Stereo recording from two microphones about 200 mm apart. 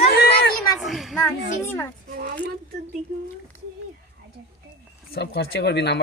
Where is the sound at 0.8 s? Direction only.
Centre (ahead or behind).